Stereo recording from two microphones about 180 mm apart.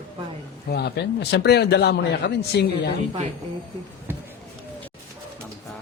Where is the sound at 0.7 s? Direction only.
65° left (ahead or behind).